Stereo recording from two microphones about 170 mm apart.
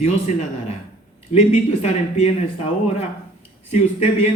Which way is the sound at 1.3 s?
40° left (ahead or behind).